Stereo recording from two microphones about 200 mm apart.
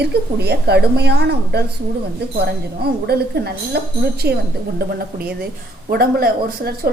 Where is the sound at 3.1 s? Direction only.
55° right (ahead or behind).